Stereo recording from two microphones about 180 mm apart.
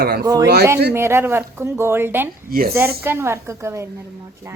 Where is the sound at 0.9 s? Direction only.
15° right (ahead or behind).